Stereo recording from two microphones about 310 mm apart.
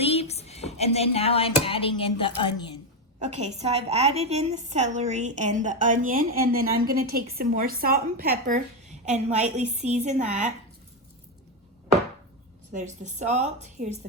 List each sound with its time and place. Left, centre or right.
0.0 s speech: centre
3.2 s a woman's voice: right
12.7 s a woman's voice: right